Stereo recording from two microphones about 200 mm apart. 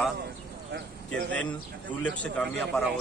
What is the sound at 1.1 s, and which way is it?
Speech, 5° left (ahead or behind).